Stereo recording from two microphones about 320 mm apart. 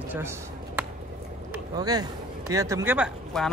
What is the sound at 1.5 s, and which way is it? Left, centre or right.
Speech, centre.